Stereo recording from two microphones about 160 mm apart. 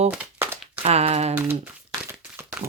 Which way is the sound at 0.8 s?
40° right (ahead or behind).